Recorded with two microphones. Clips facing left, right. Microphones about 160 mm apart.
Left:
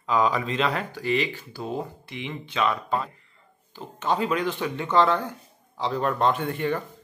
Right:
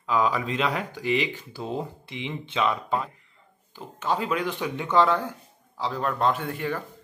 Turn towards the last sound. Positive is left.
turn(degrees=-5)  # may be behind; listen again after turning